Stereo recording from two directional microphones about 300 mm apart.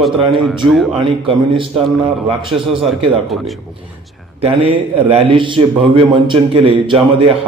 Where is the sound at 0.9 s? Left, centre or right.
Centre.